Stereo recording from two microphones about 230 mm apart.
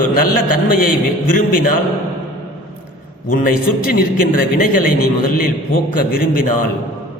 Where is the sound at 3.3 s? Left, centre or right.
Left.